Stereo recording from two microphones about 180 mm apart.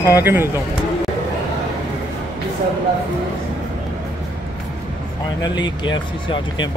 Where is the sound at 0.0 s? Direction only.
15° right (ahead or behind).